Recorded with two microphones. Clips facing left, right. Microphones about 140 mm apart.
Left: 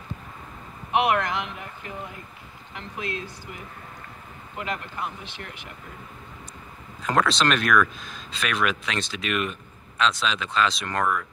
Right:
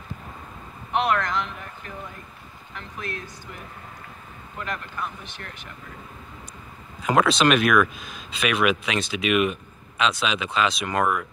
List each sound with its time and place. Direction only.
0.9 s speech: 20° left (ahead or behind)
3.0 s speech: 20° left (ahead or behind)
4.6 s speech: 20° left (ahead or behind)
7.0 s speech: 10° right (ahead or behind)